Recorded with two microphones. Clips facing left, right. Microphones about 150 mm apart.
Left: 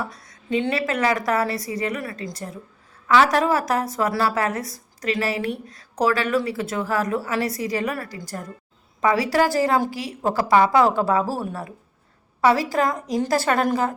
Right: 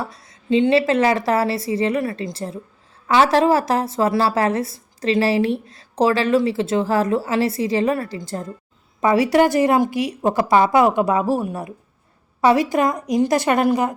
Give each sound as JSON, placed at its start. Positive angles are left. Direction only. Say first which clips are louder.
{"t": 0.0, "sound": "a woman's voice", "louder": "right 2 dB", "side_deg": -25}